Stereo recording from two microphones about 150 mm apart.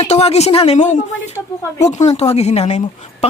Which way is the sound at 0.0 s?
45° left (ahead or behind).